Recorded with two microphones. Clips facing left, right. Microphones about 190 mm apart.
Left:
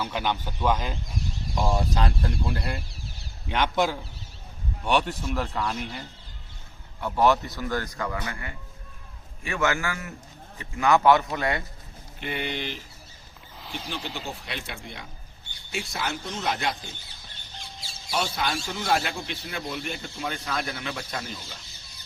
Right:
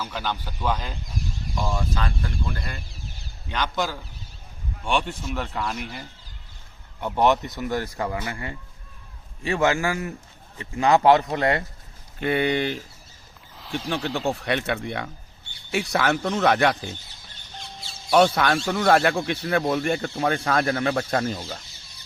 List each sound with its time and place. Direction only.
0.0 s speech: 15° left (ahead or behind)
1.5 s speech: 35° left (ahead or behind)
3.5 s speech: 25° left (ahead or behind)
4.8 s speech: 10° left (ahead or behind)
7.0 s speech: 20° right (ahead or behind)
13.9 s speech: 60° right (ahead or behind)
18.1 s speech: 65° right (ahead or behind); by 21.6 s 45° right (ahead or behind)